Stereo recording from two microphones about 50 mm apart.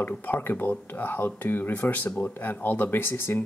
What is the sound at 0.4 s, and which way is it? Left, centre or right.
Speech, left.